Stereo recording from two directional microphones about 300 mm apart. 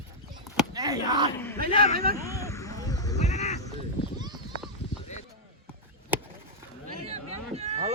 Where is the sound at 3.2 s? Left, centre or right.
Left.